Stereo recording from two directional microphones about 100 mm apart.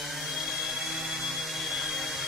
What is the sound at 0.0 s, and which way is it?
Tools, centre (ahead or behind).